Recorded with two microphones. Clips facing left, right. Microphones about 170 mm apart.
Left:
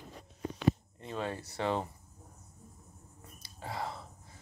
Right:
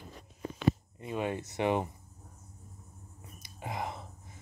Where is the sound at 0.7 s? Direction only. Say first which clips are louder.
Right 1 dB; 5° right (ahead or behind).